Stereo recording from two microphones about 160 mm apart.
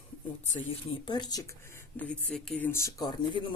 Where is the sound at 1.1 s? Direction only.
25° left (ahead or behind).